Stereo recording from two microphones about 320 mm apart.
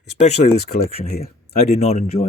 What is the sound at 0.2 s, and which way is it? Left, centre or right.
Speech, centre.